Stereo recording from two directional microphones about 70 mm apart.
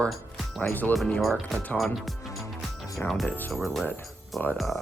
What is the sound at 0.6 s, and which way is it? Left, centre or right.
Speech, left.